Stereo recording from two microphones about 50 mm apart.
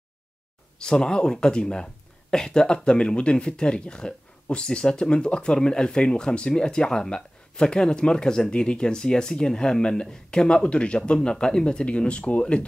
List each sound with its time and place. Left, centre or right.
0.7 s speech: centre